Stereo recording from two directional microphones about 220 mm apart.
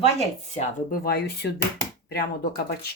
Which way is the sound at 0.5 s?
45° left (ahead or behind).